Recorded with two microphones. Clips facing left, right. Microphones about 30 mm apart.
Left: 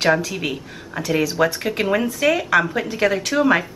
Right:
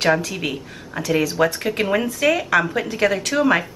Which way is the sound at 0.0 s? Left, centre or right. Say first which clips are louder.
Even; centre.